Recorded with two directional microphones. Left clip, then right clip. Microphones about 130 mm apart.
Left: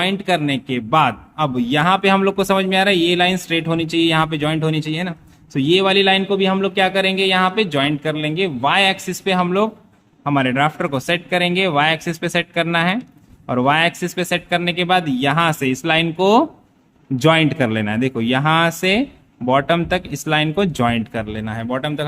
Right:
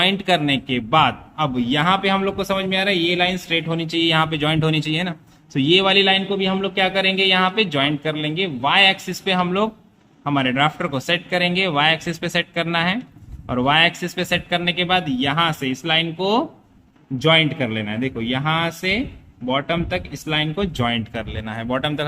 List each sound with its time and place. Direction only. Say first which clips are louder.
0.0 s a man's voice: right 1 dB; 10° left (ahead or behind)
1.5 s speech: left 2 dB; 40° left (ahead or behind)
4.3 s a man's voice: even; 20° left (ahead or behind)
6.2 s a man's voice: left 4 dB; 40° left (ahead or behind); by 22.0 s 10° left (ahead or behind)